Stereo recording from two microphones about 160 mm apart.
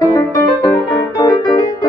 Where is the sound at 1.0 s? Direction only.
25° left (ahead or behind).